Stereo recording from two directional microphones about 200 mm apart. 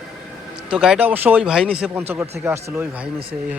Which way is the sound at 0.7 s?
5° right (ahead or behind).